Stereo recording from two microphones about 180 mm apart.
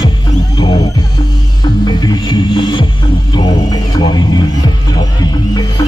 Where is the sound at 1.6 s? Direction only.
25° left (ahead or behind).